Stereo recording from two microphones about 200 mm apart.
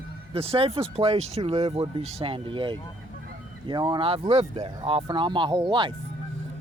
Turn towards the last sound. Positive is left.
turn(degrees=-25)  # may be behind; listen again after turning